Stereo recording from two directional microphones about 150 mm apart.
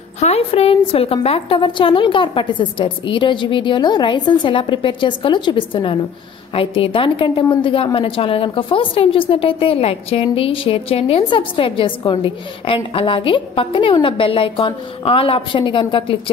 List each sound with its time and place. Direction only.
0.2 s a woman's voice: 40° left (ahead or behind)